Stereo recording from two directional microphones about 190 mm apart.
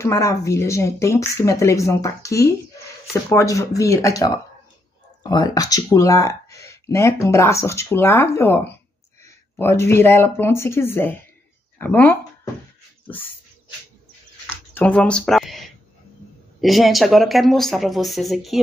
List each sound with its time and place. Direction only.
0.0 s speech: 15° left (ahead or behind)
5.2 s speech: 20° left (ahead or behind)
13.0 s dog: 10° left (ahead or behind)
14.7 s speech: 10° left (ahead or behind)